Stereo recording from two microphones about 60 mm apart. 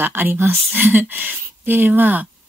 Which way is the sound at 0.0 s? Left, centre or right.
Right.